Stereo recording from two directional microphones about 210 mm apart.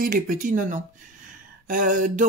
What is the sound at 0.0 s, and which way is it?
Speech, 40° right (ahead or behind).